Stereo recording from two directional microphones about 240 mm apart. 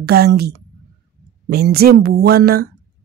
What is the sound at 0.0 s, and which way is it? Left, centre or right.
A woman's voice, right.